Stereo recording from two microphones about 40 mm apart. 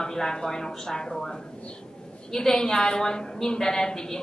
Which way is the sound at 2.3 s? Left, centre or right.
Centre.